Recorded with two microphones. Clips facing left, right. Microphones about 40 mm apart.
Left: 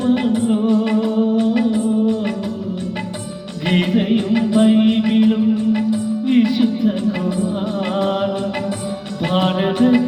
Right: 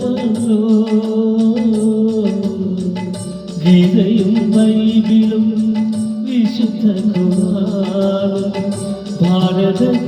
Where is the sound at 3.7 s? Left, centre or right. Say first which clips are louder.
Right 5 dB; left.